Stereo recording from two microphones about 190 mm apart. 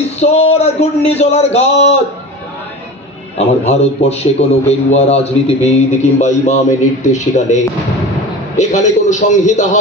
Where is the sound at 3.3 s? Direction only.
35° left (ahead or behind).